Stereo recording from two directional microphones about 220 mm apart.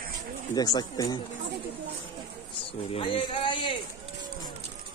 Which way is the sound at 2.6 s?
25° left (ahead or behind).